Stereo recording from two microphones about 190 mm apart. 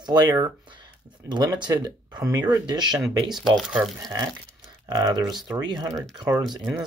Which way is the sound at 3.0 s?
Centre (ahead or behind).